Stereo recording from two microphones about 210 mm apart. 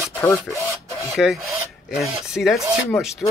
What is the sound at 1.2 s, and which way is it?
Speech, centre (ahead or behind).